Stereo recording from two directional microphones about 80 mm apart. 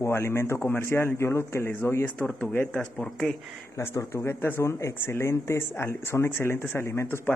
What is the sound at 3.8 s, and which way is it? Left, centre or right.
Speech, left.